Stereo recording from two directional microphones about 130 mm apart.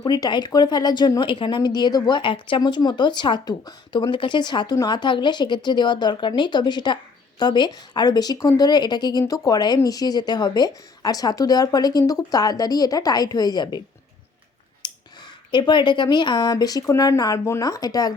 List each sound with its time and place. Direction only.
0.0 s speech: 30° left (ahead or behind)